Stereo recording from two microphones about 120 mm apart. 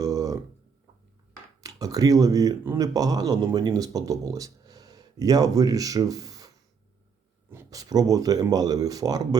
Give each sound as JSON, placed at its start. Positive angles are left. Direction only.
{"t": 0.0, "sound": "a sound", "side_deg": -25}
{"t": 1.6, "sound": "speech", "side_deg": -30}
{"t": 7.5, "sound": "speech", "side_deg": -30}